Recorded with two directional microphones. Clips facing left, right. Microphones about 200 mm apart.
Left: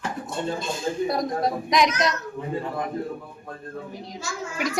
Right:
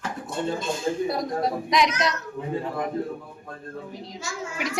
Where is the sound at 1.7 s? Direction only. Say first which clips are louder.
Left 2 dB; 45° left (ahead or behind).